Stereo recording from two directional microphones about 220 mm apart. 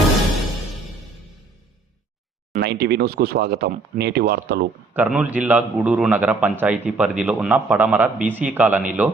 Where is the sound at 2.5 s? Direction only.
45° right (ahead or behind).